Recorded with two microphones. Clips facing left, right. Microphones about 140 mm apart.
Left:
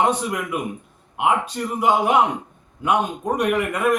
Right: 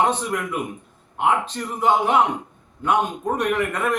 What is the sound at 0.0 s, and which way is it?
A man's voice, 10° left (ahead or behind).